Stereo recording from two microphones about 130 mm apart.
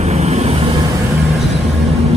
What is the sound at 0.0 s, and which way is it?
Vehicle, 60° right (ahead or behind).